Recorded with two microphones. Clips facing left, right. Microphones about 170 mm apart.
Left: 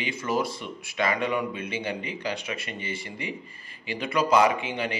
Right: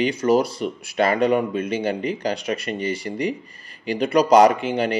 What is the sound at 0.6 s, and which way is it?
Speech, 50° right (ahead or behind).